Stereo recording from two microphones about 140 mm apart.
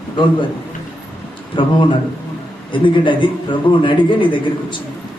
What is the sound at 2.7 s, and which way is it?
A man's voice, 35° left (ahead or behind).